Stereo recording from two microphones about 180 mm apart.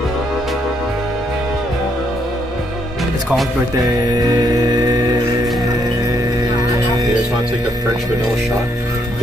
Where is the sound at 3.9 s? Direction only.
20° right (ahead or behind).